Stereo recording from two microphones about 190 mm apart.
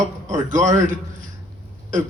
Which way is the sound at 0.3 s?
40° right (ahead or behind).